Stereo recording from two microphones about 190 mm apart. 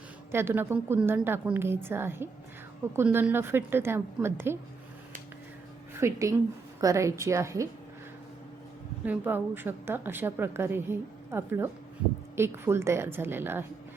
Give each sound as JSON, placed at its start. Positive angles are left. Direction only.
{"t": 0.3, "sound": "a woman's voice", "side_deg": -10}
{"t": 5.9, "sound": "a woman's voice", "side_deg": -15}
{"t": 9.0, "sound": "a woman's voice", "side_deg": -10}